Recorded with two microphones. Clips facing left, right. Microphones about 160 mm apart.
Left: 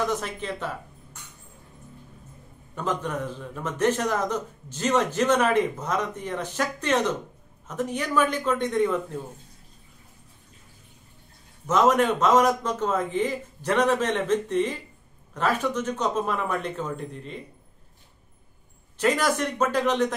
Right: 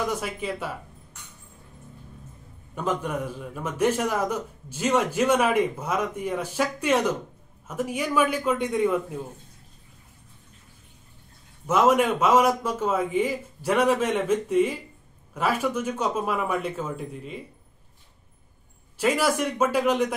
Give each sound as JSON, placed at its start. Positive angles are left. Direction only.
{"t": 0.0, "sound": "a man's voice", "side_deg": -10}
{"t": 2.7, "sound": "a man's voice", "side_deg": -10}
{"t": 11.6, "sound": "a man's voice", "side_deg": -10}
{"t": 18.9, "sound": "a man's voice", "side_deg": -5}